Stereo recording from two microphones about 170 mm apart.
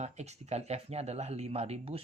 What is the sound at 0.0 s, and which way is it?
Speech, 40° right (ahead or behind).